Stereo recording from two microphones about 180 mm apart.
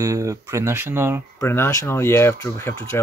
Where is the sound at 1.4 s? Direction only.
15° left (ahead or behind).